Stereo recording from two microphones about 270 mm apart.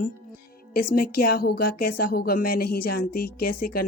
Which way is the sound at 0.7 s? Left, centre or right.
Left.